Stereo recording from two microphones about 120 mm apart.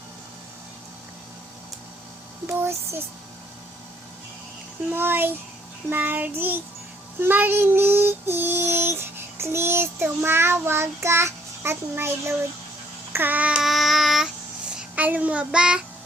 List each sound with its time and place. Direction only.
2.5 s child singing: 20° right (ahead or behind)
4.9 s child singing: 15° right (ahead or behind); by 14.3 s centre (ahead or behind)
14.8 s child singing: 15° right (ahead or behind)